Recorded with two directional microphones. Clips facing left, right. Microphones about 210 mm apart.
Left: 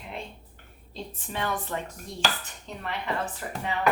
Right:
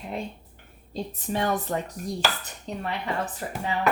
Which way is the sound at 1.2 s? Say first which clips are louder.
Right 5 dB; 40° right (ahead or behind).